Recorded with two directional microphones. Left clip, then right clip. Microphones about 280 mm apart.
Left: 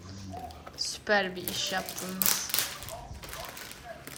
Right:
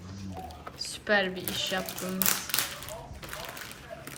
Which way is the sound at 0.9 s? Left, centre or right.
Centre.